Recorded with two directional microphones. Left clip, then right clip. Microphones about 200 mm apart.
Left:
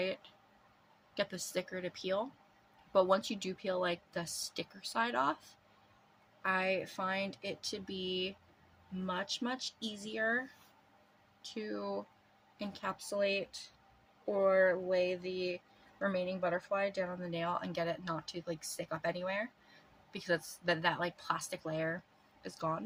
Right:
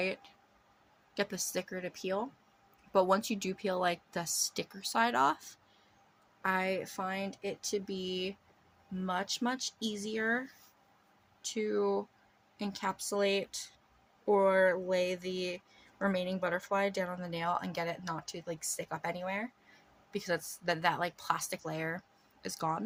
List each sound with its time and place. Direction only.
0.0 s speech: 35° right (ahead or behind)
6.4 s speech: 35° right (ahead or behind)
11.4 s speech: 45° right (ahead or behind)